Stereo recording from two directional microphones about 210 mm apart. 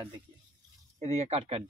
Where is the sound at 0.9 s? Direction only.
30° right (ahead or behind).